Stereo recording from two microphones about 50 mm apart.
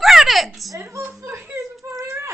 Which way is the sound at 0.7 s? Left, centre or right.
Right.